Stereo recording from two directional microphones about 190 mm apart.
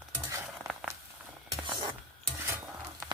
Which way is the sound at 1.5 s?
25° right (ahead or behind).